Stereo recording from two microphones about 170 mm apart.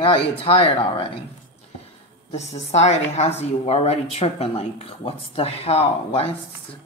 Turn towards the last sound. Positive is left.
turn(degrees=35)  # may be behind; listen again after turning